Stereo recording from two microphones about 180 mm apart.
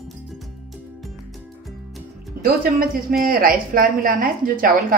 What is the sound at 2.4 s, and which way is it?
A woman's voice, 55° right (ahead or behind).